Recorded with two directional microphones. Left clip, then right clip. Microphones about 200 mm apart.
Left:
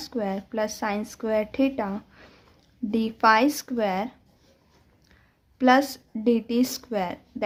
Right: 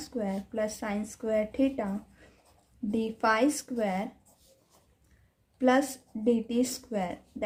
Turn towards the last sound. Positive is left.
turn(degrees=30)  # may be behind; listen again after turning